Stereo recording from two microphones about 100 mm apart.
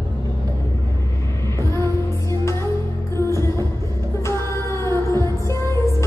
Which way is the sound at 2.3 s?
25° left (ahead or behind).